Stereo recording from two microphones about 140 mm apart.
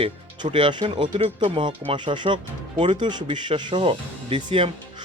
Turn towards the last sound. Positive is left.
turn(degrees=-40)  # may be behind; listen again after turning